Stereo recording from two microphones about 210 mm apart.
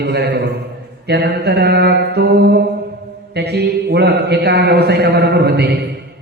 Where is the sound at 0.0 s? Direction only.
50° right (ahead or behind).